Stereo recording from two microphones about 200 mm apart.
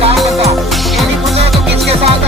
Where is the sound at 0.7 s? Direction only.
Centre (ahead or behind).